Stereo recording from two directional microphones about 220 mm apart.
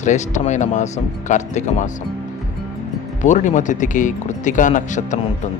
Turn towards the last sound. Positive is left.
turn(degrees=35)  # may be behind; listen again after turning